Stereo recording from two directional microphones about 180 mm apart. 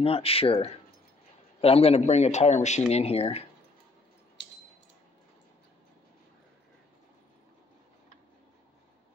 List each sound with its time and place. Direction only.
0.0 s a man's voice: 30° left (ahead or behind)